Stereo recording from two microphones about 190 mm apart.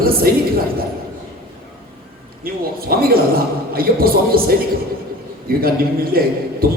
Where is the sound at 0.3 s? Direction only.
55° right (ahead or behind).